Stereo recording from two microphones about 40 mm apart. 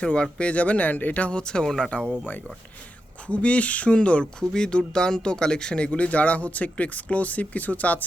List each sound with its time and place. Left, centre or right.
0.0 s speech: left
1.3 s speech: left
1.6 s speech: centre
3.2 s speech: left